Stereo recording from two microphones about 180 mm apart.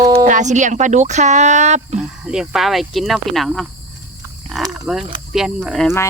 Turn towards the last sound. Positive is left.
turn(degrees=0)  # may be behind; listen again after turning